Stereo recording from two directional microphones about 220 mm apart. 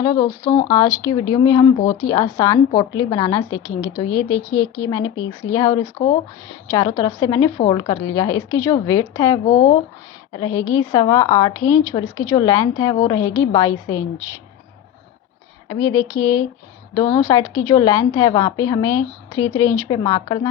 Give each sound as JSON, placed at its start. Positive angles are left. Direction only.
{"t": 0.0, "sound": "a woman's voice", "side_deg": 15}
{"t": 15.7, "sound": "a woman's voice", "side_deg": 15}